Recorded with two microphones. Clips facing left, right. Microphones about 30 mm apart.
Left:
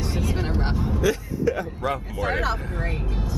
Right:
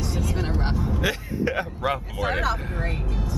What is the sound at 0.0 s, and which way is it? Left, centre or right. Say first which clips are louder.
Vehicle: left 1 dB; centre.